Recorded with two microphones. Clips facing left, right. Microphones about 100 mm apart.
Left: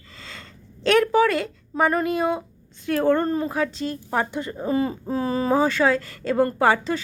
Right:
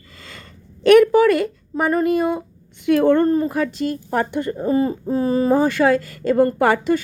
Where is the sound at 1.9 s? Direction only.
45° right (ahead or behind).